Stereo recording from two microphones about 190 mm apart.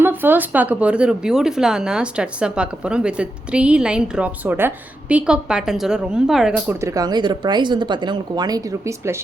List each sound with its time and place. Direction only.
0.0 s speech: 10° right (ahead or behind)
6.8 s speech: 20° right (ahead or behind)